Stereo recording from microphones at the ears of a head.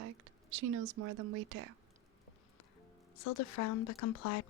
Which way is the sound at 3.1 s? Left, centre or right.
Left.